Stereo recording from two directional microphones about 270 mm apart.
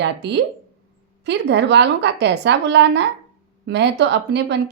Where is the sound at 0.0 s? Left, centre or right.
Right.